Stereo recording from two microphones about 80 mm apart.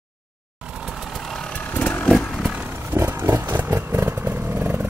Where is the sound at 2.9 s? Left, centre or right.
Right.